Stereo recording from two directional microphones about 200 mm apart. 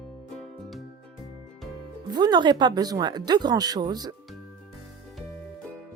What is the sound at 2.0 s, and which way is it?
Speech, 20° right (ahead or behind).